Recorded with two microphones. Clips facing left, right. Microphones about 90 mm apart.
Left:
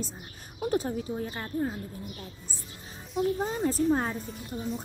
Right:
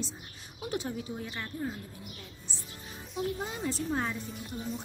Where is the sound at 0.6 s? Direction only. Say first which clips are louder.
Left 6 dB; 40° left (ahead or behind).